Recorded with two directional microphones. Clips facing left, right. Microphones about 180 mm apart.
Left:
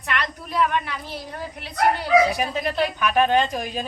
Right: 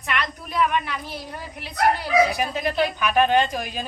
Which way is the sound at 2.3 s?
5° right (ahead or behind).